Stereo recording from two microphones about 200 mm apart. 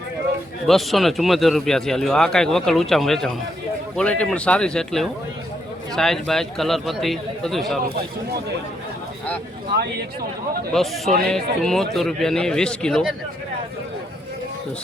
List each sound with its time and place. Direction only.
0.7 s speech: centre (ahead or behind)
9.7 s speech: 50° right (ahead or behind)
10.8 s speech: centre (ahead or behind)